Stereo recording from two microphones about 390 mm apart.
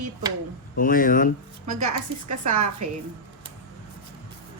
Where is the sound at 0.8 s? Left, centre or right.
Left.